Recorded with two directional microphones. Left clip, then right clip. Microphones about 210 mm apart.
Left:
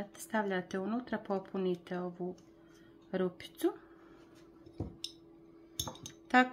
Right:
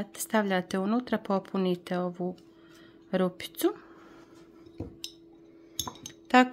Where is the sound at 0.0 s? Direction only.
50° right (ahead or behind).